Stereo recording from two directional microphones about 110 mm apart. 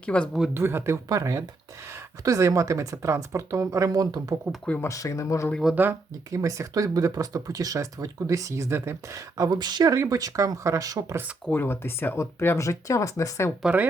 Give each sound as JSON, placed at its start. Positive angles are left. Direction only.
{"t": 0.0, "sound": "speech", "side_deg": 10}
{"t": 0.5, "sound": "speech", "side_deg": -20}
{"t": 4.8, "sound": "speech", "side_deg": 30}
{"t": 5.7, "sound": "speech", "side_deg": -20}
{"t": 11.4, "sound": "speech", "side_deg": 20}
{"t": 13.6, "sound": "a woman's voice", "side_deg": -10}